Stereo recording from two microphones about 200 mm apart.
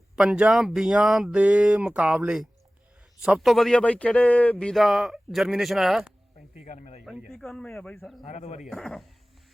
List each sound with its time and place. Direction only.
0.2 s speech: 5° right (ahead or behind)
6.7 s speech: 35° left (ahead or behind)
7.0 s speech: centre (ahead or behind)
8.2 s speech: 35° left (ahead or behind)
8.6 s speech: 5° left (ahead or behind)